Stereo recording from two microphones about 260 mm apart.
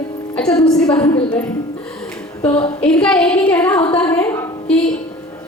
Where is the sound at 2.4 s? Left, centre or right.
Centre.